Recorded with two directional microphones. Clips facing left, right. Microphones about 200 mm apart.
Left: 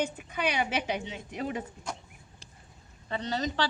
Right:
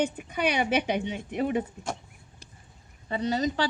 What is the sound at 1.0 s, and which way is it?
Speech, 55° right (ahead or behind).